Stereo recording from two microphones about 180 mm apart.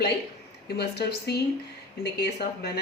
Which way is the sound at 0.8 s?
65° left (ahead or behind).